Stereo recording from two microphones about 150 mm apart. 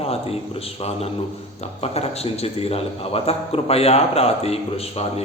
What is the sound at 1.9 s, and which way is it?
A man's voice, 45° left (ahead or behind).